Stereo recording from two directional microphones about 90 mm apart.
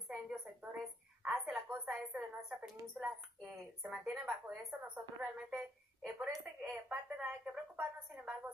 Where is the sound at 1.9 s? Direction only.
5° right (ahead or behind).